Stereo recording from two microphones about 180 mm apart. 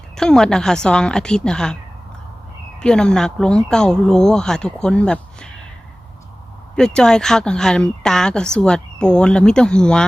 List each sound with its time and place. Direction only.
0.2 s speech: 5° left (ahead or behind)
2.8 s speech: 5° left (ahead or behind)
6.7 s speech: 5° left (ahead or behind)